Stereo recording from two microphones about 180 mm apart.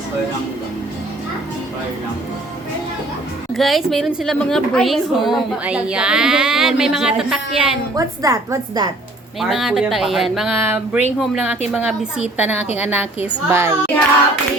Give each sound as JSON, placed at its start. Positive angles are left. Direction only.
{"t": 3.5, "sound": "a woman's voice", "side_deg": 0}
{"t": 7.9, "sound": "a woman's voice", "side_deg": -20}
{"t": 9.4, "sound": "a woman's voice", "side_deg": 0}